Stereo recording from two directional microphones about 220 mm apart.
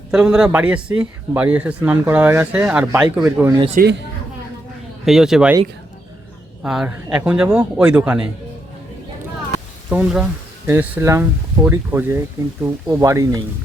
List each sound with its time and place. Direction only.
0.1 s speech: 5° right (ahead or behind)
3.8 s a woman's voice: 50° right (ahead or behind)
5.0 s speech: centre (ahead or behind)
6.6 s speech: 5° right (ahead or behind)
9.9 s speech: 5° right (ahead or behind)